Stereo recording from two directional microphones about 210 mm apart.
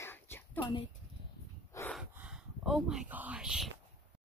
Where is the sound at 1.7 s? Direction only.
15° left (ahead or behind).